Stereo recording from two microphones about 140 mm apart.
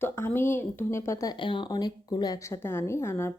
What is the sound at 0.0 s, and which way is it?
A woman's voice, 15° left (ahead or behind).